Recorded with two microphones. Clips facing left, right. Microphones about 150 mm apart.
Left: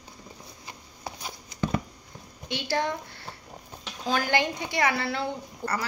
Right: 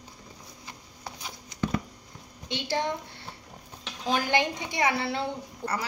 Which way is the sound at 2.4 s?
20° right (ahead or behind).